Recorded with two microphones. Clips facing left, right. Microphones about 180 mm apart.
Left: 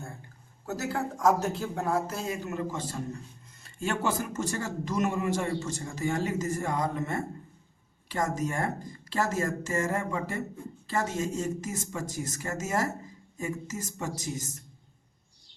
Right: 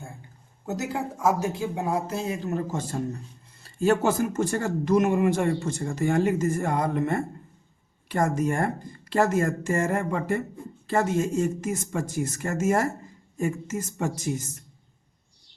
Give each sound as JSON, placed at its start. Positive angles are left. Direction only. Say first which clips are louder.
{"t": 0.6, "sound": "speech", "louder": "right 2 dB", "side_deg": -20}
{"t": 3.6, "sound": "speech", "louder": "right 8 dB", "side_deg": -40}